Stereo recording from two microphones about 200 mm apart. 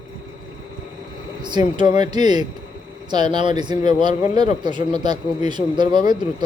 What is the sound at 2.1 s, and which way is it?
Speech, 20° right (ahead or behind).